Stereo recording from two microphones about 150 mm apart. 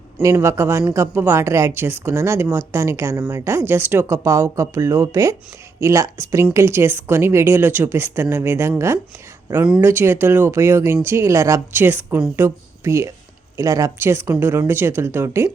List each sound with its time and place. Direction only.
0.2 s a man's voice: 20° right (ahead or behind)